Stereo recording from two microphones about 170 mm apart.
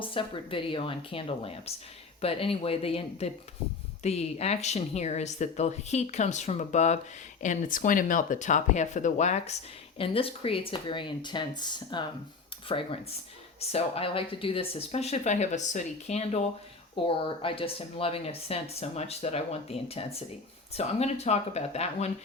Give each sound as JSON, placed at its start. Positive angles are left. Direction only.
{"t": 0.0, "sound": "speech", "side_deg": 30}